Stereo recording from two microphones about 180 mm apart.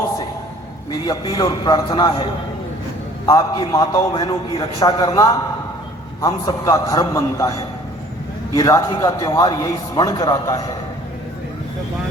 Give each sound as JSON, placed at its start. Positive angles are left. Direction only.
{"t": 0.9, "sound": "a man's voice", "side_deg": 20}
{"t": 3.2, "sound": "a man's voice", "side_deg": 20}